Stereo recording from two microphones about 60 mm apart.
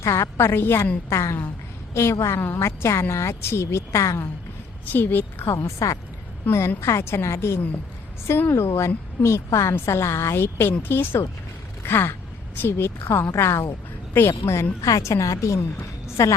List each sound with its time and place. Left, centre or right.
0.0 s a woman's voice: left
2.4 s speech: left
4.9 s a woman's voice: left
5.5 s speech: left
6.5 s a woman's voice: left
6.8 s a woman's voice: left